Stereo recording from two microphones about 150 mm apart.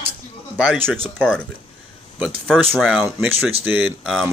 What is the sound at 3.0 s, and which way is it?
Speech, 10° right (ahead or behind).